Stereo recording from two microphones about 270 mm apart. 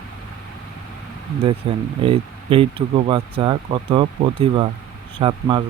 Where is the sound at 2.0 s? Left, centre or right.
Centre.